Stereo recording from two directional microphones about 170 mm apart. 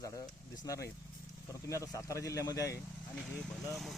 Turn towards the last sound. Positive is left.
turn(degrees=0)  # may be behind; listen again after turning